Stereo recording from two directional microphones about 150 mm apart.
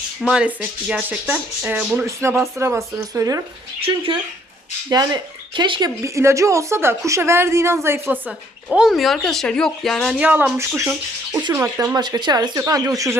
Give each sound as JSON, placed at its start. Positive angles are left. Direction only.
{"t": 0.2, "sound": "speech", "side_deg": -5}
{"t": 3.8, "sound": "speech", "side_deg": -35}
{"t": 6.0, "sound": "speech", "side_deg": -20}
{"t": 10.2, "sound": "speech", "side_deg": -10}
{"t": 11.9, "sound": "speech", "side_deg": -30}